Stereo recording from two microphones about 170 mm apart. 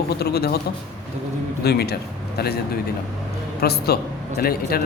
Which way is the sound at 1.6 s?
70° left (ahead or behind).